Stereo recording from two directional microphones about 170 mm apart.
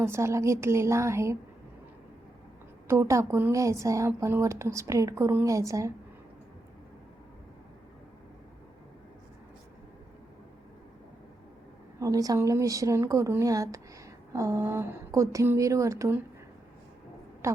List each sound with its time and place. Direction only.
0.0 s speech: 15° right (ahead or behind)
2.8 s speech: 15° right (ahead or behind)
11.9 s a woman's voice: 20° right (ahead or behind)
17.4 s speech: 15° right (ahead or behind)